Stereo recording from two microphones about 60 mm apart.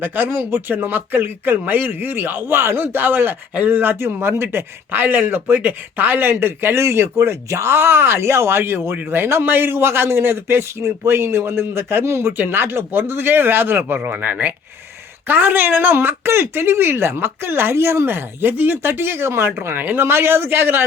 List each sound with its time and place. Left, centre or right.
0.0 s a man's voice: right